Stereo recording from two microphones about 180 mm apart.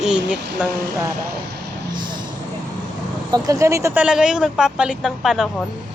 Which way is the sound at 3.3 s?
20° right (ahead or behind).